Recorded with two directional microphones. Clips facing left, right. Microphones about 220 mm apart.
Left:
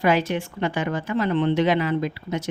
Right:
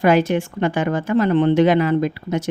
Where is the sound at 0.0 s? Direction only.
50° right (ahead or behind).